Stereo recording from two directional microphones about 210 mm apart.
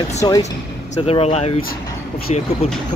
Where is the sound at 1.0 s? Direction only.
30° left (ahead or behind).